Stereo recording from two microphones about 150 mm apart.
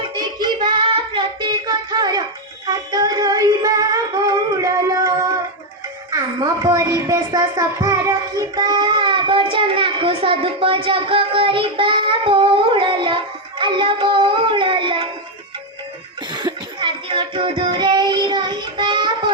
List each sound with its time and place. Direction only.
0.0 s child singing: 30° right (ahead or behind)
2.6 s music: 25° right (ahead or behind)
6.1 s a sound: 25° right (ahead or behind)
16.3 s child singing: 30° right (ahead or behind)